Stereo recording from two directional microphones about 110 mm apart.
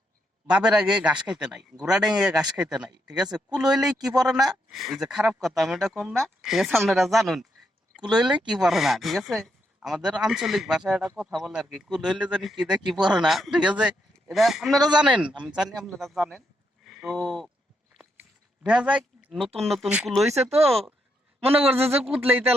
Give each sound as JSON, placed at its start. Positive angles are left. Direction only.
{"t": 0.4, "sound": "a man's voice", "side_deg": -10}
{"t": 16.8, "sound": "a sound", "side_deg": 0}
{"t": 17.2, "sound": "speech", "side_deg": 0}
{"t": 18.2, "sound": "a sound", "side_deg": -5}
{"t": 19.5, "sound": "speech", "side_deg": 0}
{"t": 21.4, "sound": "a man's voice", "side_deg": -60}